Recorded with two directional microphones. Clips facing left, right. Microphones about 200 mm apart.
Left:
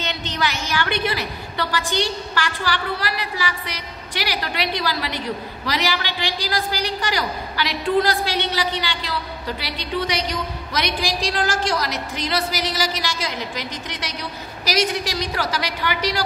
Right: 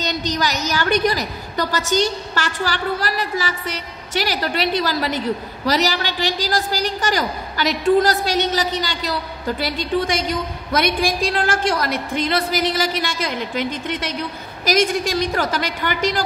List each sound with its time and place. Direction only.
0.0 s a woman's voice: 40° right (ahead or behind)